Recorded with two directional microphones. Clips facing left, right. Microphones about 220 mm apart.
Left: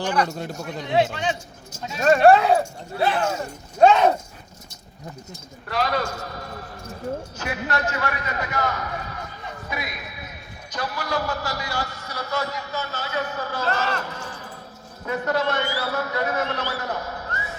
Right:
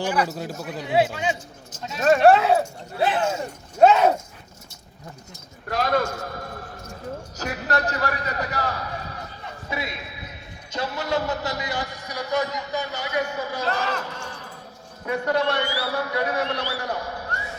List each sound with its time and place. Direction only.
0.0 s a man's voice: 5° right (ahead or behind)
3.0 s speech: 20° right (ahead or behind)
3.8 s a man's voice: 5° right (ahead or behind)
5.6 s a man's voice: 50° right (ahead or behind)
7.3 s a man's voice: 40° right (ahead or behind); by 14.0 s 10° right (ahead or behind)
15.0 s a man's voice: 15° right (ahead or behind)